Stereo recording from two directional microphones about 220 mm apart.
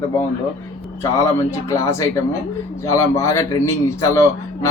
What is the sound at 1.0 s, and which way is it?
Speech, 15° left (ahead or behind).